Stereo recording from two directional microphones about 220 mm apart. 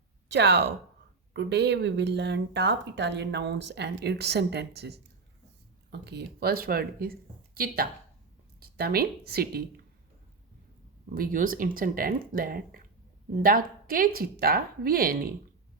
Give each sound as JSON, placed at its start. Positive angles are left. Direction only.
{"t": 0.3, "sound": "speech", "side_deg": -50}
{"t": 11.1, "sound": "speech", "side_deg": -40}